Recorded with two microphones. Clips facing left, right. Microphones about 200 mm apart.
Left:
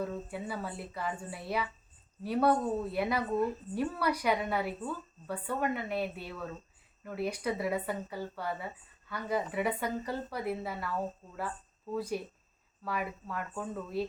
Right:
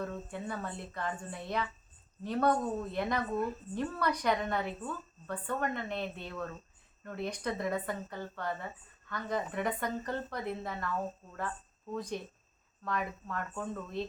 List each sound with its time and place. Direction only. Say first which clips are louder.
0.0 s speech: left 2 dB; 10° left (ahead or behind)